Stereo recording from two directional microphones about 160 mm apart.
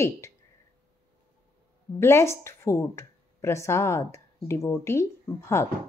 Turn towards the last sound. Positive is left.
turn(degrees=15)  # may be behind; listen again after turning